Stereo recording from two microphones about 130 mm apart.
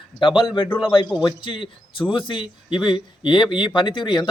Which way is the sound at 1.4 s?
40° left (ahead or behind).